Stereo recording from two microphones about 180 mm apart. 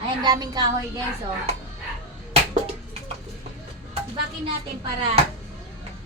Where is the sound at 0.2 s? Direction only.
25° right (ahead or behind).